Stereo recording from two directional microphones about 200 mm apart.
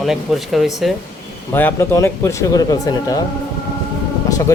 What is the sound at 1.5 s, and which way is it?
Speech, 10° left (ahead or behind).